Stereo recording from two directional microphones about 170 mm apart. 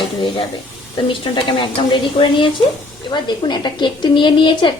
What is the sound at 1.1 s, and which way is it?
A woman's voice, 30° left (ahead or behind).